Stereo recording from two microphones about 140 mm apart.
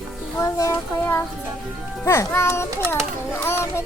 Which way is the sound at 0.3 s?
20° left (ahead or behind).